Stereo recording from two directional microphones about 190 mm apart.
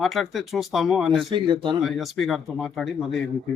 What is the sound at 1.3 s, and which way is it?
Speech, 25° right (ahead or behind).